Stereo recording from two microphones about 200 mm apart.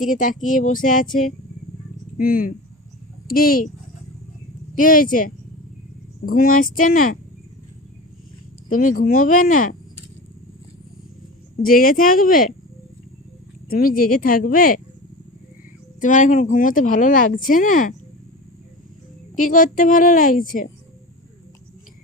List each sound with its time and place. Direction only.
0.0 s speech: 40° left (ahead or behind)
2.1 s a woman's voice: 45° left (ahead or behind)
4.7 s a woman's voice: 45° left (ahead or behind)
8.7 s a woman's voice: 45° left (ahead or behind)
11.6 s a woman's voice: 45° left (ahead or behind)
13.7 s a woman's voice: 45° left (ahead or behind)
16.0 s speech: 40° left (ahead or behind)
19.4 s a woman's voice: 40° left (ahead or behind)